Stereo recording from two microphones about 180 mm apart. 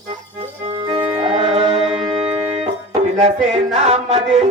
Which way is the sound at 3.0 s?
35° right (ahead or behind).